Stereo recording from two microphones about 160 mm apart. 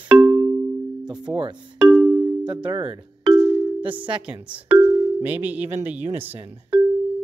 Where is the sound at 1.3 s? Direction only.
15° right (ahead or behind).